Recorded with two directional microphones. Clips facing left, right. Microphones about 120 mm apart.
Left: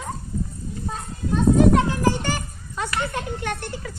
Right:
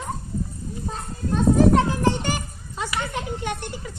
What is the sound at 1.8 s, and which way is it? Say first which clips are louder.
Children playing: even; 15° right (ahead or behind).